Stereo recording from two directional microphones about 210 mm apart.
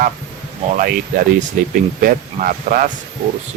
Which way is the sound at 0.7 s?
40° right (ahead or behind).